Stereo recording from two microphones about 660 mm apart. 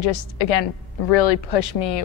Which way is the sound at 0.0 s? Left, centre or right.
Left.